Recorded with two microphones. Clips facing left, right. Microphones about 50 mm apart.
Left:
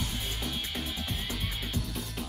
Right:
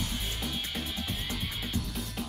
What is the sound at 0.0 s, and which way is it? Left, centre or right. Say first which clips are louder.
Music: even; centre.